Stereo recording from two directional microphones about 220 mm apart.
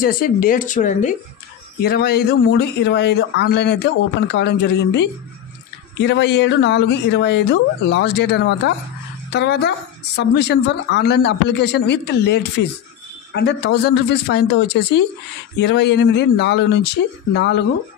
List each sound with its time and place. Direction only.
0.0 s speech: 40° left (ahead or behind)